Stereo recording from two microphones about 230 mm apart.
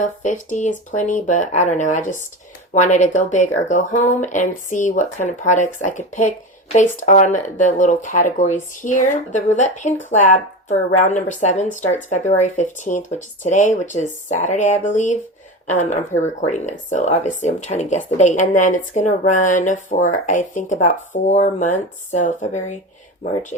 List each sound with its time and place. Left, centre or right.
0.0 s speech: left